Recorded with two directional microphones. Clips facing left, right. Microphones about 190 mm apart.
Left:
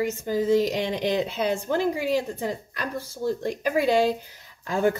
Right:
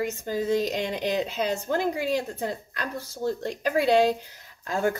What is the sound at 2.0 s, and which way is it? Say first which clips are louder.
A woman's voice: left 2 dB; 10° left (ahead or behind).